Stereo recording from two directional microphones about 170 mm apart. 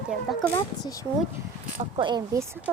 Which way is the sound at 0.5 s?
20° left (ahead or behind).